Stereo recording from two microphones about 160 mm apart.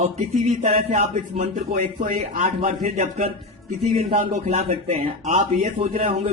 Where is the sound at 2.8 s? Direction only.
45° right (ahead or behind).